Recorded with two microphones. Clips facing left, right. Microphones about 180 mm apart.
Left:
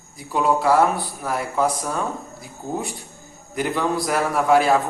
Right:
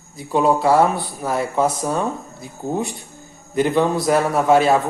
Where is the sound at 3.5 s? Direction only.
25° right (ahead or behind).